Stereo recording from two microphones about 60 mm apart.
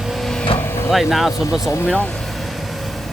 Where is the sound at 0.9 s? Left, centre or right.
Centre.